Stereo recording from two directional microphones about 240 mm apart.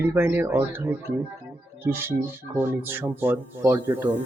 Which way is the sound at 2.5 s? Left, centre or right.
Centre.